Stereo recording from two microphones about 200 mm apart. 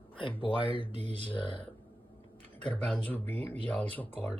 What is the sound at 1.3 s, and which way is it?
Speech, 25° left (ahead or behind).